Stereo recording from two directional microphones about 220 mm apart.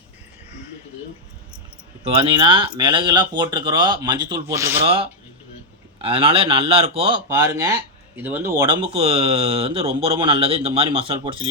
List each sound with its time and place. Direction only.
2.1 s speech: 20° right (ahead or behind)
6.0 s speech: 25° right (ahead or behind)